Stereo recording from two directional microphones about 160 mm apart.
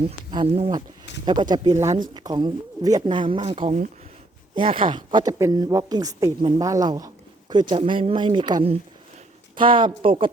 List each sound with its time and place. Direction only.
0.0 s speech: 30° right (ahead or behind)